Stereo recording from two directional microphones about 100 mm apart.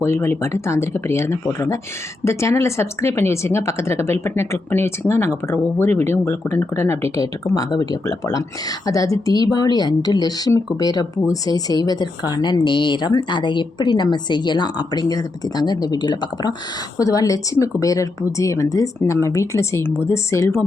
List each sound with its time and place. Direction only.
0.0 s a woman's voice: 25° left (ahead or behind); by 16.6 s 45° left (ahead or behind)
17.0 s speech: 35° left (ahead or behind)